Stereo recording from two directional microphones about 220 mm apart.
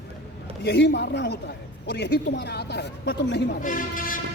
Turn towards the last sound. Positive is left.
turn(degrees=40)  # may be behind; listen again after turning